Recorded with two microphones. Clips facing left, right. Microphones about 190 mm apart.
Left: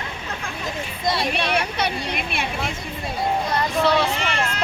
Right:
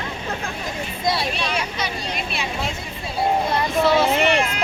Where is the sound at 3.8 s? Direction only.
Centre (ahead or behind).